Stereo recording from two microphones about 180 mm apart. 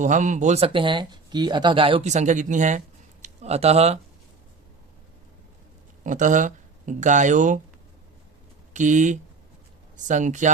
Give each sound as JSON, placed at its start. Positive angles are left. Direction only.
{"t": 0.0, "sound": "speech", "side_deg": -45}
{"t": 6.0, "sound": "speech", "side_deg": -45}
{"t": 8.7, "sound": "speech", "side_deg": -40}